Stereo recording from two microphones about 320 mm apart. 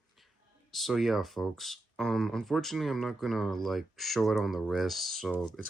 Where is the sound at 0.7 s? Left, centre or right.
Centre.